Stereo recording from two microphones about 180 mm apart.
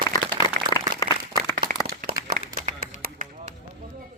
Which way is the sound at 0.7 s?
20° left (ahead or behind).